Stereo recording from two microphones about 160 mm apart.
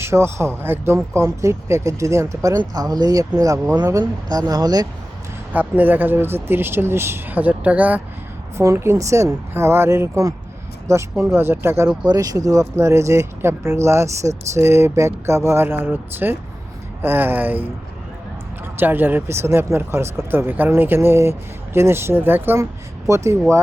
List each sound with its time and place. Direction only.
0.0 s speech: 15° right (ahead or behind)
5.5 s speech: 10° right (ahead or behind)
18.8 s speech: 10° right (ahead or behind)